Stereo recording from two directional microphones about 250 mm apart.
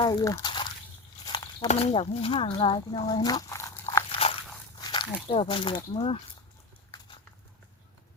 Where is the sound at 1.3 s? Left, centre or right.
Left.